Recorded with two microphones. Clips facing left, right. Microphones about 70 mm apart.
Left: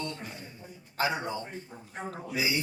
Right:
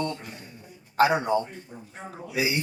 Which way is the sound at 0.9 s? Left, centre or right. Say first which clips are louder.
Right 9 dB; right.